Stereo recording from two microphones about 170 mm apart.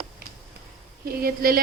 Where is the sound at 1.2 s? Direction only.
60° right (ahead or behind).